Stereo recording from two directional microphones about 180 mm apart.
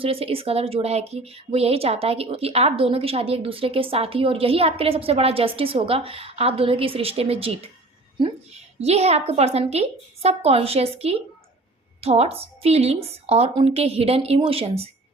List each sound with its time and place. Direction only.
0.0 s speech: 30° right (ahead or behind)
8.8 s speech: 35° right (ahead or behind)